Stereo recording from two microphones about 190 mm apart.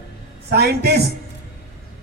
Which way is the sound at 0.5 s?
55° right (ahead or behind).